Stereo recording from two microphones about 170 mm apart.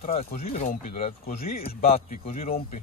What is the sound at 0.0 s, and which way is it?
Speech, 50° left (ahead or behind).